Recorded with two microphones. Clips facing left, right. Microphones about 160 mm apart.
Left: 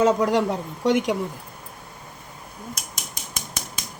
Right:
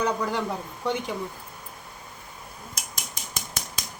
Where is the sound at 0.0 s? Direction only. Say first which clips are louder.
Left 7 dB; 90° left.